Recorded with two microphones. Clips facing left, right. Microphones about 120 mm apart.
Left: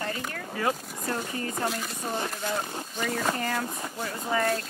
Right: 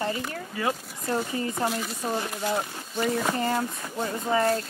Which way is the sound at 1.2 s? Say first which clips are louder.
Right 4 dB; centre (ahead or behind).